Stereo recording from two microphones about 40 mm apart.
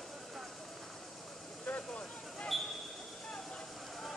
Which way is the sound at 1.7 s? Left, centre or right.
Centre.